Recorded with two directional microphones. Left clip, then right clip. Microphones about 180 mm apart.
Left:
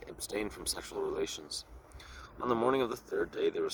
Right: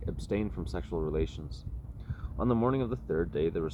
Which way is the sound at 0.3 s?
45° left (ahead or behind).